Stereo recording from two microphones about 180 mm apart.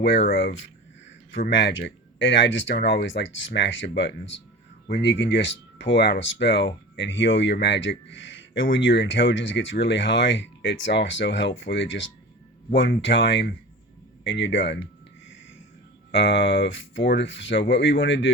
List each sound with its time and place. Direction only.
0.3 s speech: 60° left (ahead or behind); by 0.7 s 75° left (ahead or behind)
1.5 s speech: 90° left
14.3 s speech: 90° left
16.1 s speech: 90° left